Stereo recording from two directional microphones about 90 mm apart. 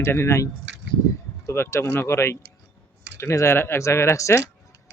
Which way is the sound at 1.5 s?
30° left (ahead or behind).